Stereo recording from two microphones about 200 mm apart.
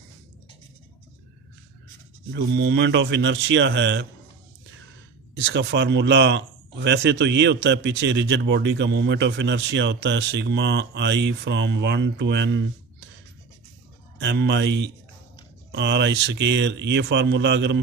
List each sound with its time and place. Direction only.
2.3 s speech: 60° right (ahead or behind)
5.4 s speech: 60° right (ahead or behind)
14.1 s speech: 60° right (ahead or behind)